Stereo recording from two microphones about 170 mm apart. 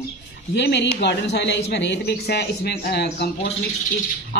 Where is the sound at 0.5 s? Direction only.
90° left.